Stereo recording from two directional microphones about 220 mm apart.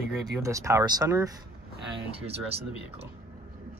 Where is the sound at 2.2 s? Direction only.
25° right (ahead or behind).